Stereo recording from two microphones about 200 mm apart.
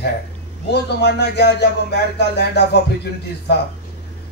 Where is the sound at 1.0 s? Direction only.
55° left (ahead or behind).